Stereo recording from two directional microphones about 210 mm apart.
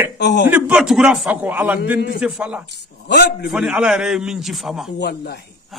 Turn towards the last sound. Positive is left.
turn(degrees=50)  # may be behind; listen again after turning